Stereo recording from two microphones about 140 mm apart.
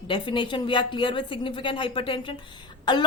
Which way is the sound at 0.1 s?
35° left (ahead or behind).